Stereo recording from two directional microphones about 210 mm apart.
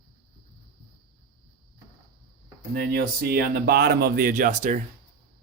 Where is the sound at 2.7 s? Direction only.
45° right (ahead or behind).